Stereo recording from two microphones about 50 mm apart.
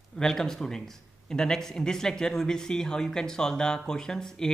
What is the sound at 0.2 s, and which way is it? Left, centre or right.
A man's voice, centre.